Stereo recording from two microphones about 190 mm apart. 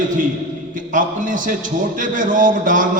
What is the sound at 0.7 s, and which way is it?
A man's voice, 45° right (ahead or behind).